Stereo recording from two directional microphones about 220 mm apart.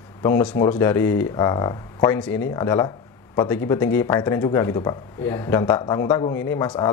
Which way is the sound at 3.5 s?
10° left (ahead or behind).